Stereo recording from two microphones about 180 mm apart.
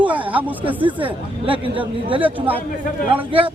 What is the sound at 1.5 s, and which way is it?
Speech, 30° right (ahead or behind).